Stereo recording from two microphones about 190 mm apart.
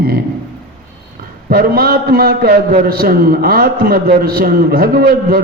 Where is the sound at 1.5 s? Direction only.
55° right (ahead or behind).